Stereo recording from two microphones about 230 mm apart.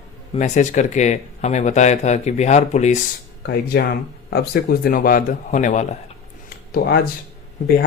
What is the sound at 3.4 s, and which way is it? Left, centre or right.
Speech, left.